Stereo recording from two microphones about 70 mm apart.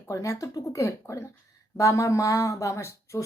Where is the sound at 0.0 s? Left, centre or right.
Left.